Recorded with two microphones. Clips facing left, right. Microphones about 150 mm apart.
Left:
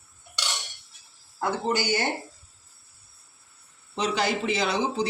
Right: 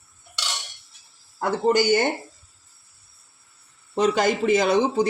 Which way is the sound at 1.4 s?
50° right (ahead or behind).